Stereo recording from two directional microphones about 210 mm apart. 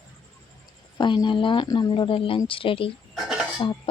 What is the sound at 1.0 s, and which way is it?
Speech, 20° left (ahead or behind).